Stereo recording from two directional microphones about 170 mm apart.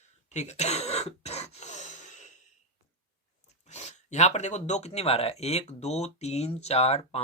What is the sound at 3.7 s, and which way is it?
Speech, 40° left (ahead or behind).